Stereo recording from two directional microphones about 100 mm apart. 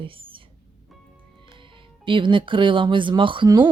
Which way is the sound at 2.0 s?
55° right (ahead or behind).